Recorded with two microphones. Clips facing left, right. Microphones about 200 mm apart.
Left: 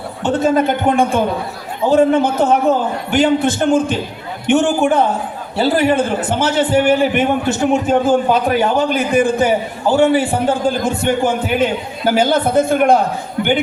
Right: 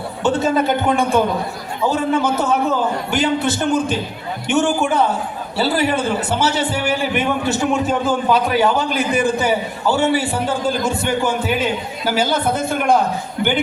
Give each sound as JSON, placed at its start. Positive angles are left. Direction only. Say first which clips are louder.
{"t": 0.2, "sound": "a man's voice", "louder": "left 2 dB", "side_deg": 55}